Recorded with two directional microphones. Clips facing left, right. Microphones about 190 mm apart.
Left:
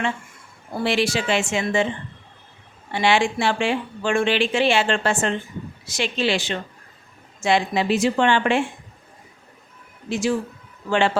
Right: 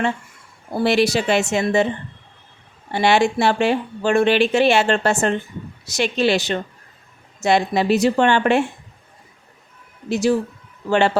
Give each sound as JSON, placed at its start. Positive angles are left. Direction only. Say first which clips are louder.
{"t": 0.7, "sound": "speech", "louder": "right 4 dB", "side_deg": -40}
{"t": 2.9, "sound": "speech", "louder": "right 3 dB", "side_deg": -40}
{"t": 10.1, "sound": "speech", "louder": "right 4 dB", "side_deg": -40}